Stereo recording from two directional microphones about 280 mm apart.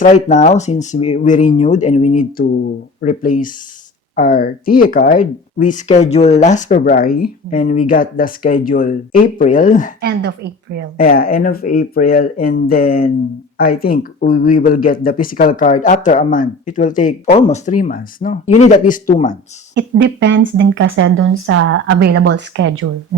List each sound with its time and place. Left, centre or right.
0.0 s speech: left
10.0 s a woman's voice: right
10.9 s speech: left
19.7 s speech: right